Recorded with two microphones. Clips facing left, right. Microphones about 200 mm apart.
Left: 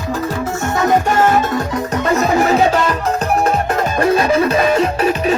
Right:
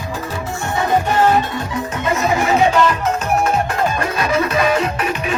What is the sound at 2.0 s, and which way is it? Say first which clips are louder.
Music: left 3 dB; 40° left (ahead or behind).